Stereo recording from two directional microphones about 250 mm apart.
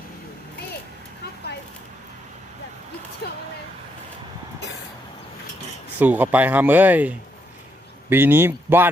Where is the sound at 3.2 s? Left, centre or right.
Left.